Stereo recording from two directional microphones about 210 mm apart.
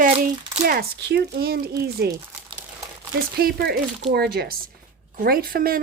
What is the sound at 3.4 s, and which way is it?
Speech, 45° right (ahead or behind).